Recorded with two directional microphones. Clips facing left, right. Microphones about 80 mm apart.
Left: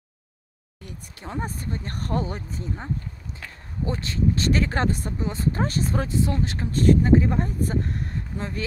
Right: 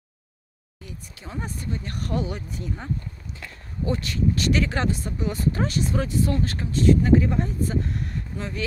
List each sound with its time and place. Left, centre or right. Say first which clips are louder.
0.8 s speech: left 2 dB; left
3.8 s speech: right 1 dB; left
5.2 s speech: right 1 dB; left
6.7 s speech: even; left
7.0 s speech: even; left